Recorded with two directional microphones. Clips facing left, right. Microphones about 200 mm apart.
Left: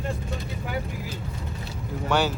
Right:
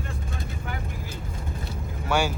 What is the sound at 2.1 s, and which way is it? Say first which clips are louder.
Speech: left 1 dB; 10° right (ahead or behind).